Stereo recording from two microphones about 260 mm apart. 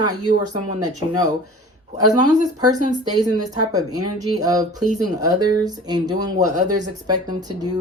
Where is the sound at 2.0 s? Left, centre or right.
Left.